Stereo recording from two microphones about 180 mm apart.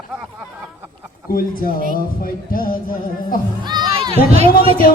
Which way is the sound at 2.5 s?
50° left (ahead or behind).